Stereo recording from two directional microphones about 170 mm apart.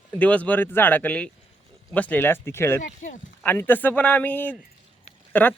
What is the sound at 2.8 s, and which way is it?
Speech, 50° left (ahead or behind).